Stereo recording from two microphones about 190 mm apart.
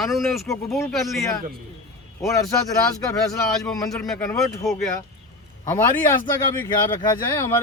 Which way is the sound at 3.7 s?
20° left (ahead or behind).